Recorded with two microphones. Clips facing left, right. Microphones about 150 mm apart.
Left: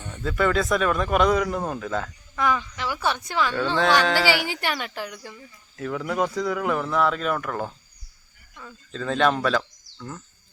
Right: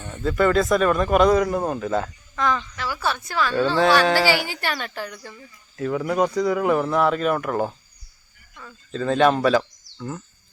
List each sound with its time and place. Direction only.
0.2 s speech: centre (ahead or behind)
2.3 s speech: 10° left (ahead or behind)
4.0 s speech: 10° right (ahead or behind)
4.4 s speech: 15° left (ahead or behind)
5.7 s speech: 5° right (ahead or behind)
6.3 s speech: 5° right (ahead or behind)